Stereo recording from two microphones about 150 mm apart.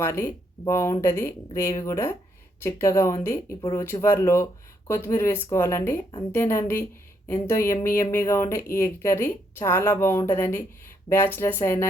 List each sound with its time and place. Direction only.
0.0 s a woman's voice: 15° left (ahead or behind)